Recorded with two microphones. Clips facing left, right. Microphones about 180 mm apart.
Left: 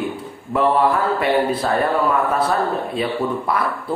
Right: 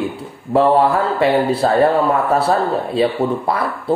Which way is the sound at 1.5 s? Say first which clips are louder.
Right 5 dB; 30° right (ahead or behind).